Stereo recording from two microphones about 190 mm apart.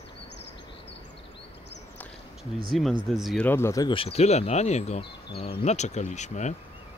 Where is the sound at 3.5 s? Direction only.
15° left (ahead or behind); by 6.5 s 40° left (ahead or behind).